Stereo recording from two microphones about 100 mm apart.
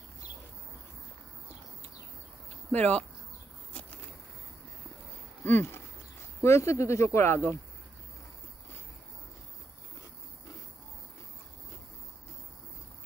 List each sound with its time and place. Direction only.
2.7 s speech: 10° left (ahead or behind)
5.4 s a sound: 20° left (ahead or behind)
6.4 s speech: 25° left (ahead or behind)